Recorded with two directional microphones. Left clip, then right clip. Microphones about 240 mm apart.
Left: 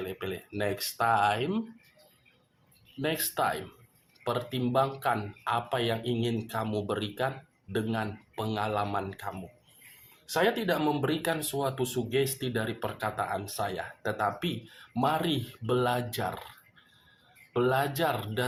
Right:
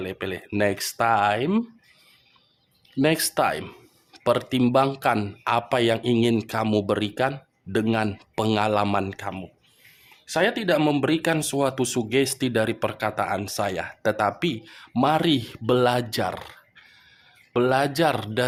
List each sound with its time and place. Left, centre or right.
0.0 s speech: right
3.0 s speech: right
17.5 s speech: right